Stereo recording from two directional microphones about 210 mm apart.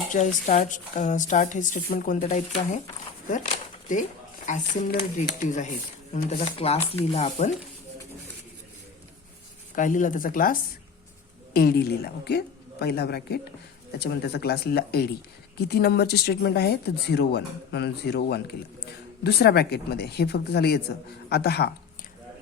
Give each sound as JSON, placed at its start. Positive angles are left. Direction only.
{"t": 0.1, "sound": "a woman's voice", "side_deg": 35}
{"t": 6.1, "sound": "a woman's voice", "side_deg": 30}
{"t": 9.7, "sound": "a woman's voice", "side_deg": 40}